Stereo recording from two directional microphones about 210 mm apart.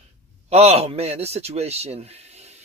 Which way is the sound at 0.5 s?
30° right (ahead or behind).